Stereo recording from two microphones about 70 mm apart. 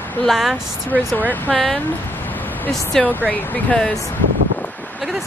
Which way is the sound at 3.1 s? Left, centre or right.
Left.